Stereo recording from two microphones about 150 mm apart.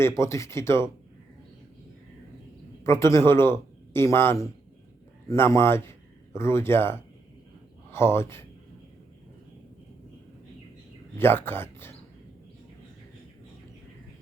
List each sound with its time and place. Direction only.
0.0 s speech: 20° left (ahead or behind)
2.8 s a man's voice: 20° left (ahead or behind)
11.2 s speech: 15° left (ahead or behind)